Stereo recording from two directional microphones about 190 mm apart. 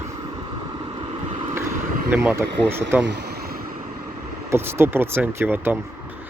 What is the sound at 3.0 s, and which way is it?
Vehicle, 60° right (ahead or behind).